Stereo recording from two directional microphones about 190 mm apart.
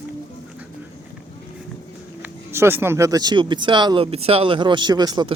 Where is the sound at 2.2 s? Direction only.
15° right (ahead or behind).